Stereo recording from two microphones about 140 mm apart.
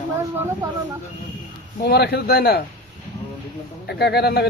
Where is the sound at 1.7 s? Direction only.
90° left.